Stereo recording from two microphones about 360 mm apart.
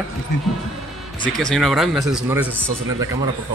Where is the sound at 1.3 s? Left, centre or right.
Centre.